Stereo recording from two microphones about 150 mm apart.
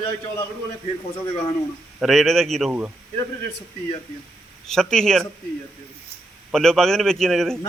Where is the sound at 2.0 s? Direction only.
Centre (ahead or behind).